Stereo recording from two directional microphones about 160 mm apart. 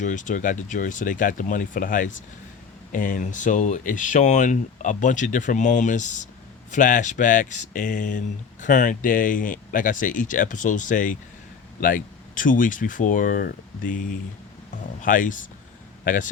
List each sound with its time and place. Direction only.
0.0 s speech: 50° left (ahead or behind)